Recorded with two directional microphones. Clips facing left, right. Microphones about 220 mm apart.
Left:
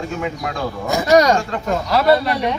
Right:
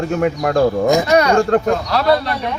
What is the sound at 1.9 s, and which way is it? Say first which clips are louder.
Speech: left 5 dB; 5° left (ahead or behind).